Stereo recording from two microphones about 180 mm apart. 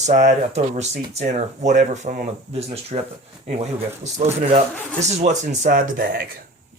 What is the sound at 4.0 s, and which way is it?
Speech, 40° right (ahead or behind).